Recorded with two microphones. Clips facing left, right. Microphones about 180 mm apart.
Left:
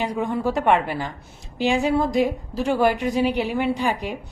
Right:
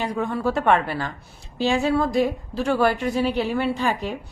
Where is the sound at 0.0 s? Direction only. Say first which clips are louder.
Left 1 dB; 15° left (ahead or behind).